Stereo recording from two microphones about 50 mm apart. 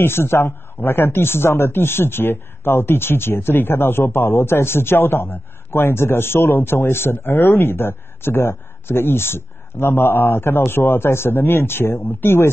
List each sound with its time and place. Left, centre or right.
0.0 s a man's voice: left